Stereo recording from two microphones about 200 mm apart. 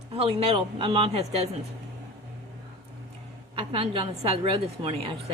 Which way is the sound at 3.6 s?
25° right (ahead or behind).